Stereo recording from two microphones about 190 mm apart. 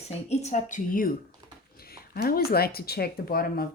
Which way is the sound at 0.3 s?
40° left (ahead or behind).